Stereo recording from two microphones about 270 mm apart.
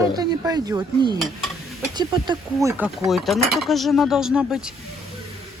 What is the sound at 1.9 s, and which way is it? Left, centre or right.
Speech, centre.